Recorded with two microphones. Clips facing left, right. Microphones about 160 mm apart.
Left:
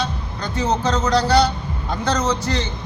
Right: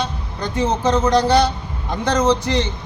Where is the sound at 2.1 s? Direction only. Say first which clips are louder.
Right 4 dB; 15° right (ahead or behind).